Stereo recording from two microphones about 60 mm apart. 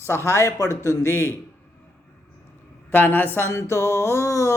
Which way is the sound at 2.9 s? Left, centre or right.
Left.